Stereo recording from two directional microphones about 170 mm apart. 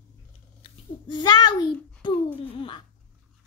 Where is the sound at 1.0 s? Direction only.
25° left (ahead or behind).